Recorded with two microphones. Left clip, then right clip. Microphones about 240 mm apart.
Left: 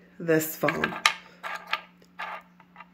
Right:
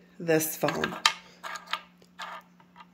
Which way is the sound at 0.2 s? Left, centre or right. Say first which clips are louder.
Left 1 dB; centre.